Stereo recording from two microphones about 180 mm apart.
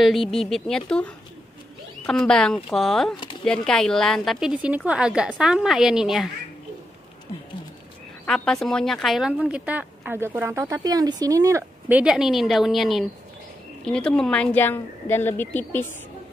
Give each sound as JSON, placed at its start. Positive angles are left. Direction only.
{"t": 0.0, "sound": "a woman's voice", "side_deg": 0}
{"t": 8.3, "sound": "a woman's voice", "side_deg": 5}